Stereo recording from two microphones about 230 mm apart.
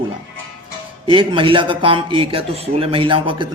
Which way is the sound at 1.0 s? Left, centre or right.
Right.